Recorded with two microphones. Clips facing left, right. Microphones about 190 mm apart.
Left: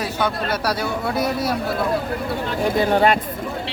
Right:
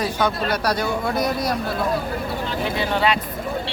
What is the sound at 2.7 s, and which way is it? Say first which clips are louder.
Speech: left 5 dB; 50° left (ahead or behind).